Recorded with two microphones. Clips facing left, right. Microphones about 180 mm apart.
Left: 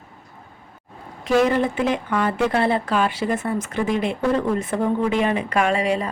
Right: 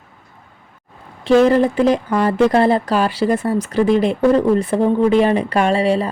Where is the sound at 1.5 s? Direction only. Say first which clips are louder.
Right 7 dB; 35° right (ahead or behind).